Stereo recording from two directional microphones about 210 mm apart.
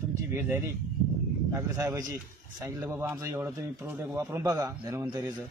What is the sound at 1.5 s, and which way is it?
A man's voice, 15° right (ahead or behind).